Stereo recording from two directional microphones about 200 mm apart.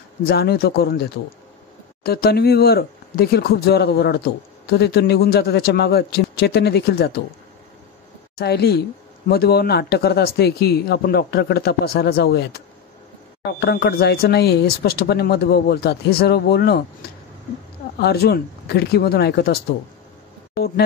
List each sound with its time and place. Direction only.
0.3 s speech: 50° left (ahead or behind)
8.4 s speech: 55° left (ahead or behind)
17.9 s speech: 55° left (ahead or behind)